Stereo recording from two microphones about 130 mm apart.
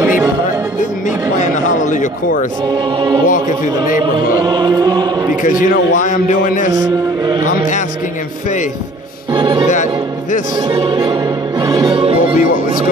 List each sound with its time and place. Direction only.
1.0 s a sound: 70° left (ahead or behind)
3.3 s a man's voice: 90° left
4.5 s music: 35° right (ahead or behind)
5.3 s a man's voice: 90° left
9.3 s music: 40° right (ahead or behind)
10.7 s music: 40° right (ahead or behind)
12.4 s music: 90° left